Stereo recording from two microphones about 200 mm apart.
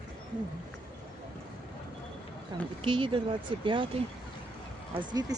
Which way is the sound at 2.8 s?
25° right (ahead or behind).